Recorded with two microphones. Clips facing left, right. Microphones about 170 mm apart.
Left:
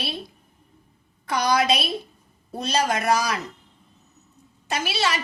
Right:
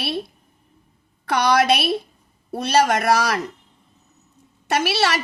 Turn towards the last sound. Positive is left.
turn(degrees=-70)  # may be behind; listen again after turning